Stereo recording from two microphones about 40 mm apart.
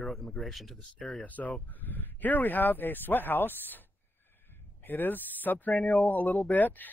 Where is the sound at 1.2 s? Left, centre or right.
Left.